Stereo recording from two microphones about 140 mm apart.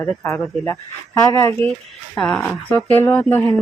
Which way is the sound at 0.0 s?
10° left (ahead or behind).